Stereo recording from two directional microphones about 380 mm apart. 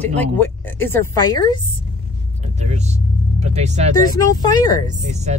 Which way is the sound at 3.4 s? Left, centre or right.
Centre.